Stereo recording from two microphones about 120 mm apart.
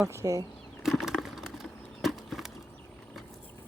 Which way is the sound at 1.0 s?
5° right (ahead or behind).